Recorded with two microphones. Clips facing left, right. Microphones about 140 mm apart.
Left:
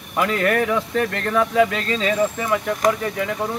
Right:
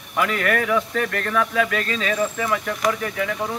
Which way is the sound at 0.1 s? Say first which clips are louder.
Left 2 dB; 25° left (ahead or behind).